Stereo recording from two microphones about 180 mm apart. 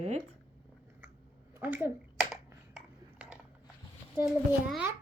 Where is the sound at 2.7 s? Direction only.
5° right (ahead or behind).